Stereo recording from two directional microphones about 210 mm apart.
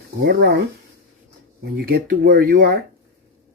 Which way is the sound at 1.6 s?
45° right (ahead or behind).